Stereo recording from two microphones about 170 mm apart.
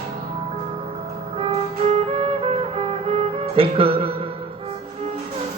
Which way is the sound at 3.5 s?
35° right (ahead or behind).